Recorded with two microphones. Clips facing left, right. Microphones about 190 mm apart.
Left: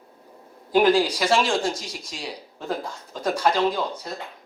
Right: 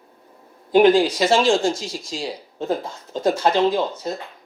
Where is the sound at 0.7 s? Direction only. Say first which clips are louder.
Right 4 dB; 25° right (ahead or behind).